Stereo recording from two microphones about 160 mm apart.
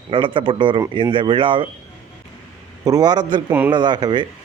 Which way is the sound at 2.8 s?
25° right (ahead or behind).